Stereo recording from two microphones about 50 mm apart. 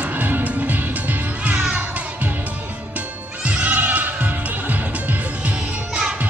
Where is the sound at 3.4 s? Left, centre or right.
Right.